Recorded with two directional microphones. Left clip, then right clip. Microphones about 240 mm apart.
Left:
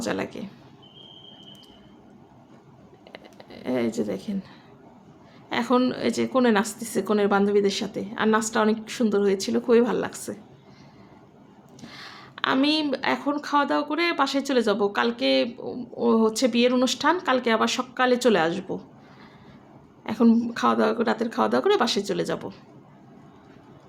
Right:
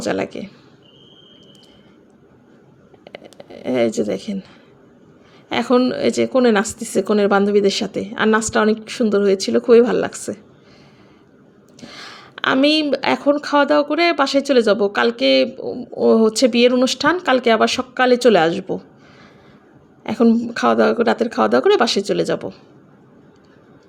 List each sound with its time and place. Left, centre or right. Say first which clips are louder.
0.0 s speech: right 7 dB; centre
3.0 s a sound: right 7 dB; centre
5.5 s speech: right 6 dB; right
11.8 s speech: right 6 dB; right
20.1 s speech: right 5 dB; centre